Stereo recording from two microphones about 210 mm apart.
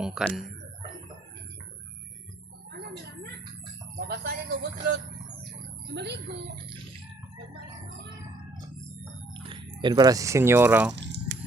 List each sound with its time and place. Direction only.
0.0 s speech: centre (ahead or behind)
3.9 s speech: 50° right (ahead or behind)
9.3 s speech: 25° right (ahead or behind)
10.9 s a sound: 55° right (ahead or behind)